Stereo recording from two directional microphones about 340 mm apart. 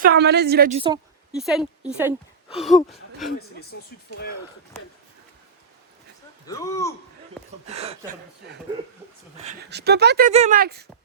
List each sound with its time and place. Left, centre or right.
0.0 s speech: right
1.3 s a woman's voice: centre
3.7 s speech: left
6.5 s a man's voice: centre
7.7 s speech: centre
9.4 s speech: right